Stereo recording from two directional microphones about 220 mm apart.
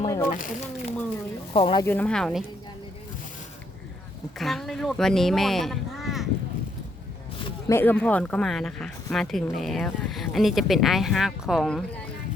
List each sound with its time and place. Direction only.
0.0 s a sound: 15° left (ahead or behind)
0.3 s speech: 35° left (ahead or behind)
1.5 s speech: 25° left (ahead or behind)
1.8 s speech: 10° left (ahead or behind)
4.4 s speech: centre (ahead or behind)
7.4 s speech: 10° left (ahead or behind)